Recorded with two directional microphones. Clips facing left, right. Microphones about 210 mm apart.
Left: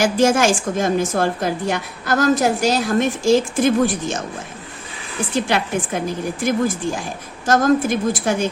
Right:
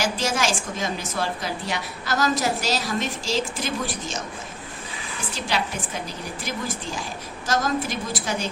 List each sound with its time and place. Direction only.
0.0 s a woman's voice: 50° left (ahead or behind)
5.3 s a woman's voice: 55° left (ahead or behind)